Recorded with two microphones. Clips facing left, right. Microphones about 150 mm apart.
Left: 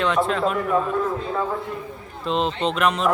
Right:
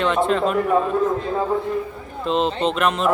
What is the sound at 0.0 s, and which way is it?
Speech, centre (ahead or behind).